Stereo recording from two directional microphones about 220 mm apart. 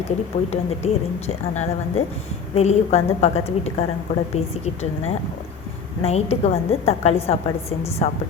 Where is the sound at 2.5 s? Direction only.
30° left (ahead or behind).